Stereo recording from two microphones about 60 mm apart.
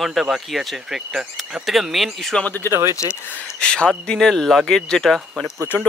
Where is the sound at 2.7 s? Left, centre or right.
Right.